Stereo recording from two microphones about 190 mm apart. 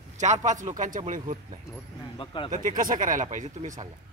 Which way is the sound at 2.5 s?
45° right (ahead or behind).